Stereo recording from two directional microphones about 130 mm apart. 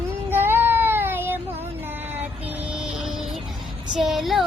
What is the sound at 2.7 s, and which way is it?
Music, 5° right (ahead or behind).